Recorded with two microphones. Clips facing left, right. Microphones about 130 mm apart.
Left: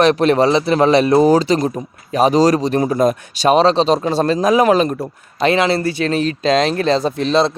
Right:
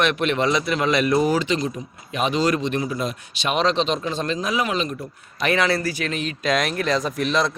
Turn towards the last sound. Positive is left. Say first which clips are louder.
# left 7 dB
turn(degrees=30)  # may be behind; listen again after turning